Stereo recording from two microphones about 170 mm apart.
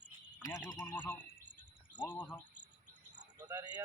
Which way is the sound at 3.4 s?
25° right (ahead or behind).